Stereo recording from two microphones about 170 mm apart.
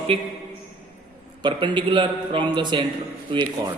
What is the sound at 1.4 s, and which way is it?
A man's voice, 25° right (ahead or behind).